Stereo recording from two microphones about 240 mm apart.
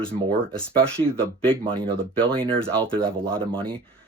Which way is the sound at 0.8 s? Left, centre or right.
Centre.